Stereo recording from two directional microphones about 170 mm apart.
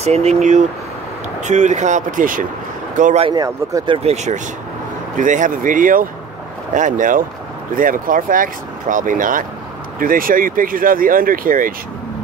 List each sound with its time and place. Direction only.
0.0 s speech: 40° right (ahead or behind)
3.3 s speech: 20° right (ahead or behind); by 11.7 s 55° right (ahead or behind)